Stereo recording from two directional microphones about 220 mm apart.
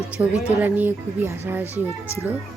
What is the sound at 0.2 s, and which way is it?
Speech, 5° right (ahead or behind).